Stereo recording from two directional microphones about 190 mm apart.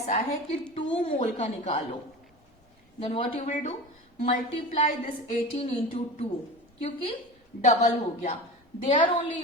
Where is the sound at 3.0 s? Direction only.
30° left (ahead or behind).